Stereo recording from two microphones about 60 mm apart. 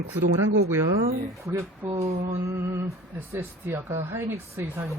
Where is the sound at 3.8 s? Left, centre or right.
Right.